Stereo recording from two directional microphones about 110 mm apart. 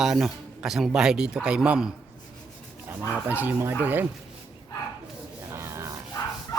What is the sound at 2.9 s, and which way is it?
Speech, 15° right (ahead or behind).